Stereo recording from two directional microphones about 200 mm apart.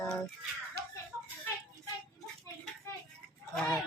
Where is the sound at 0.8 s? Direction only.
55° right (ahead or behind).